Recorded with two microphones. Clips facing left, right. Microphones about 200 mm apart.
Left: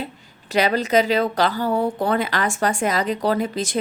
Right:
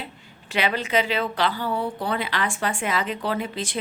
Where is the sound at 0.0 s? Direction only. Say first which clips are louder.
Left 6 dB; 40° left (ahead or behind).